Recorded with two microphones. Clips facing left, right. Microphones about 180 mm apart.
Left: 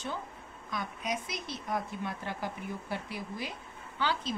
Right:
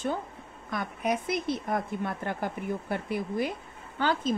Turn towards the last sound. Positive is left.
turn(degrees=-50)  # may be behind; listen again after turning